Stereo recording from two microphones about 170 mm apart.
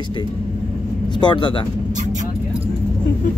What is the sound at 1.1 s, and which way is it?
Speech, 25° left (ahead or behind).